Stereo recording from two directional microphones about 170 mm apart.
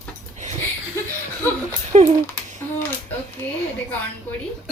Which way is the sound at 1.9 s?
40° right (ahead or behind).